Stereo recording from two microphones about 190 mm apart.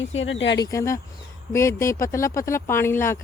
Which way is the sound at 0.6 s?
15° left (ahead or behind).